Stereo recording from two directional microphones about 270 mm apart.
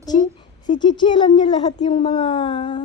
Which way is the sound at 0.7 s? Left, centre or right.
Centre.